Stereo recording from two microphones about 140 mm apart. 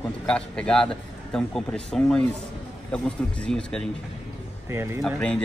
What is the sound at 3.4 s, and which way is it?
Speech, 5° left (ahead or behind).